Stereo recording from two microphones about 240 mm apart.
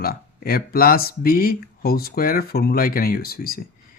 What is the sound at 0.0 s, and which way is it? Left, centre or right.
Speech, left.